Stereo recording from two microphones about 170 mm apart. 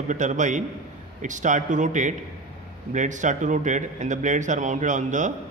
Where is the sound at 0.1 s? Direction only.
45° right (ahead or behind).